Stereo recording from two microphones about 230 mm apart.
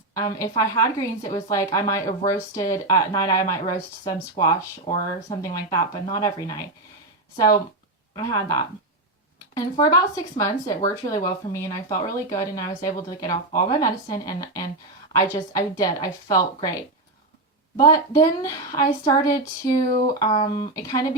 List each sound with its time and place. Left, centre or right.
0.1 s speech: centre
4.9 s speech: left
5.4 s speech: centre
8.1 s speech: centre
9.6 s speech: centre